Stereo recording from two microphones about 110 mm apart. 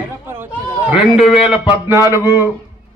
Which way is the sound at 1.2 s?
5° right (ahead or behind).